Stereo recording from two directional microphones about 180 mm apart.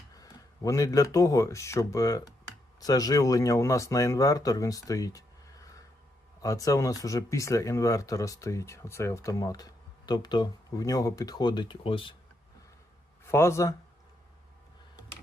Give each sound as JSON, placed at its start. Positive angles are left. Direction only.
{"t": 0.1, "sound": "a sound", "side_deg": 20}
{"t": 1.1, "sound": "speech", "side_deg": 20}
{"t": 13.2, "sound": "speech", "side_deg": 15}